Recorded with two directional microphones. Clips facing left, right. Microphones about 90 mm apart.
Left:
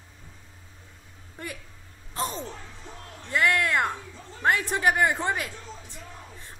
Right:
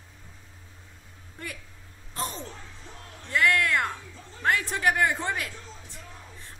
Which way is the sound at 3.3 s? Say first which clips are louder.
Even; 15° left (ahead or behind).